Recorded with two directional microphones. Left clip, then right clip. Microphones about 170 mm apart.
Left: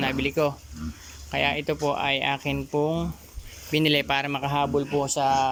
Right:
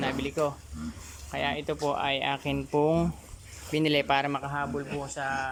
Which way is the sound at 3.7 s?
Centre (ahead or behind).